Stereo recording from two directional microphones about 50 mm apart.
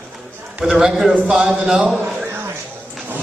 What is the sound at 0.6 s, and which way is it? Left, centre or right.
Speech, centre.